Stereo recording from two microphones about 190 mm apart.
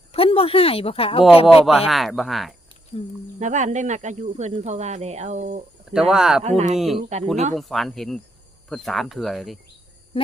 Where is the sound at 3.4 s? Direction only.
40° right (ahead or behind).